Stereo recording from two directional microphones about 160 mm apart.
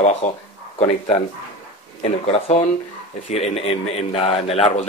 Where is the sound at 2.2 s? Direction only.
40° left (ahead or behind).